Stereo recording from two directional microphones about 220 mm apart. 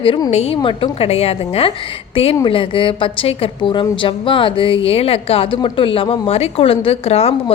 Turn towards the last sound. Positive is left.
turn(degrees=25)  # may be behind; listen again after turning